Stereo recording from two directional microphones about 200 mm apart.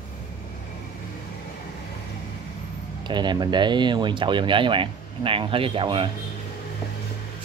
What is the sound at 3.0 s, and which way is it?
Speech, 20° right (ahead or behind).